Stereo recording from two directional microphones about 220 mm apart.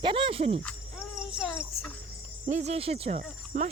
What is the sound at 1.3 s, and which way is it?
Child singing, 5° right (ahead or behind).